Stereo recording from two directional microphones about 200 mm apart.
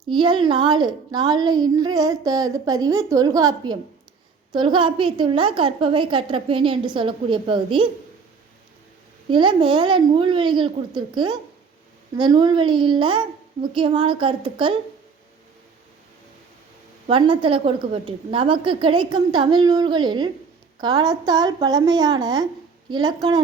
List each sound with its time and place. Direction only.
0.0 s a woman's voice: 25° right (ahead or behind)
9.3 s a woman's voice: 25° right (ahead or behind)
17.1 s a woman's voice: 25° right (ahead or behind)